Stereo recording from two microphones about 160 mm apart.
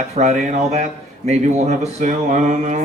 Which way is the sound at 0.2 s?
45° right (ahead or behind).